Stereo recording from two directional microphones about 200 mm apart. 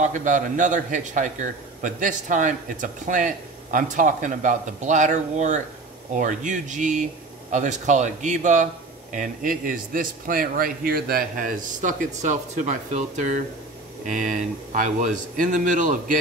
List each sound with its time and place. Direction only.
0.0 s a man's voice: 40° right (ahead or behind)